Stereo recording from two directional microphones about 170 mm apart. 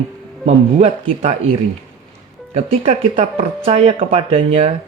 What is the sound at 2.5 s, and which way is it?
Speech, 40° right (ahead or behind).